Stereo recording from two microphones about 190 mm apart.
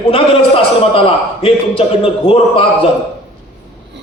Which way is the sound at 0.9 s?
30° left (ahead or behind).